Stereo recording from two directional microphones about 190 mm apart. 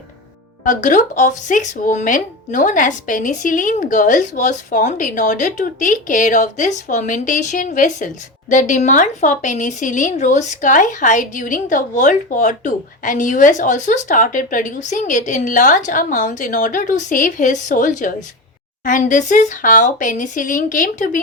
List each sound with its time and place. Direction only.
0.6 s speech: 40° left (ahead or behind)